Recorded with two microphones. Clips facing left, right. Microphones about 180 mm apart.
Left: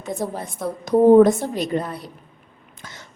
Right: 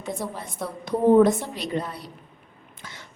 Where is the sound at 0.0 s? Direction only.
45° left (ahead or behind).